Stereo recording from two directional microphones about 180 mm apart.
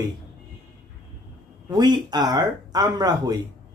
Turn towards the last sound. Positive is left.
turn(degrees=-20)  # may be behind; listen again after turning